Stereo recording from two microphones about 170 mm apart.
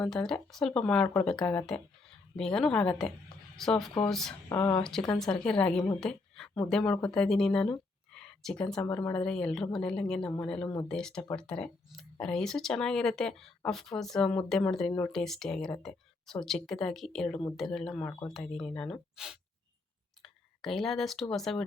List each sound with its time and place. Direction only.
0.0 s speech: 5° left (ahead or behind)
4.4 s speech: 20° left (ahead or behind)
4.8 s speech: 5° left (ahead or behind)
6.0 s a sound: 5° left (ahead or behind)
6.7 s speech: 5° left (ahead or behind)